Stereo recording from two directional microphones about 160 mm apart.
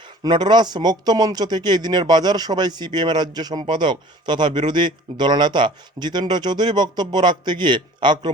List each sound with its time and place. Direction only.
0.2 s speech: 25° right (ahead or behind)